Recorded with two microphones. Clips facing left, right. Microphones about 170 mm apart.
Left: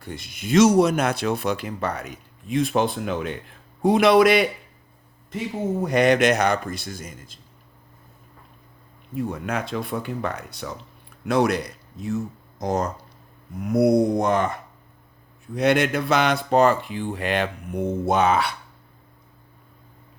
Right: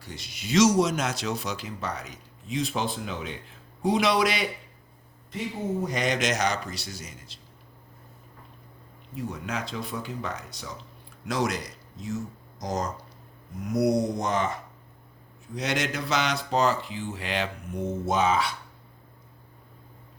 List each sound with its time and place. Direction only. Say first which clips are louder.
0.0 s speech: left 6 dB; 55° left (ahead or behind)
5.8 s speech: left 11 dB; 60° left (ahead or behind)
9.1 s speech: left 6 dB; 55° left (ahead or behind)
15.5 s speech: left 9 dB; 60° left (ahead or behind)